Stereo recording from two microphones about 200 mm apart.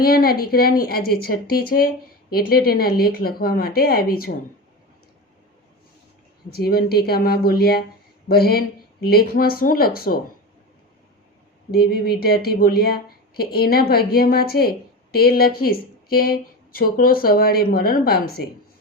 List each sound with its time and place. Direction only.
0.0 s speech: 50° left (ahead or behind)
6.5 s speech: 50° left (ahead or behind)
11.7 s speech: 50° left (ahead or behind)